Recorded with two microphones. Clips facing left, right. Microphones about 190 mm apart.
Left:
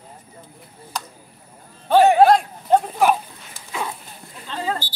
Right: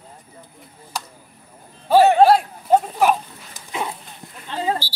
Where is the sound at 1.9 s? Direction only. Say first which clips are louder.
Even; 5° right (ahead or behind).